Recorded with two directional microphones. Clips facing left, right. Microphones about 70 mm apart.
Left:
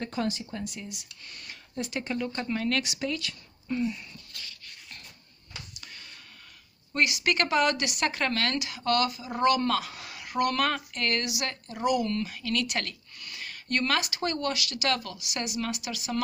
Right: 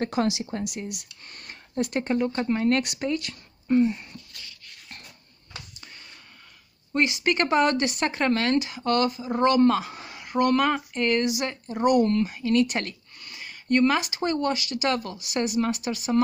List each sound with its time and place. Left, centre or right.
0.0 s speech: right
1.3 s speech: right
2.1 s a woman's voice: right
6.9 s a woman's voice: right
7.4 s a woman's voice: right
10.5 s a woman's voice: centre
11.8 s speech: right
12.2 s speech: right